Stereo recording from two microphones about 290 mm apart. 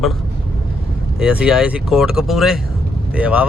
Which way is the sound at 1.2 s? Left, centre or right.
Centre.